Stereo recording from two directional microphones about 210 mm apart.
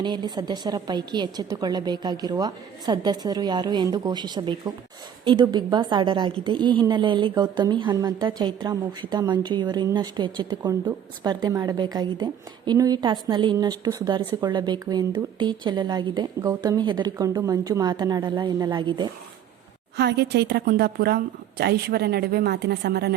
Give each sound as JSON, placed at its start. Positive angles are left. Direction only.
{"t": 0.0, "sound": "a woman's voice", "side_deg": -20}
{"t": 20.0, "sound": "a woman's voice", "side_deg": -50}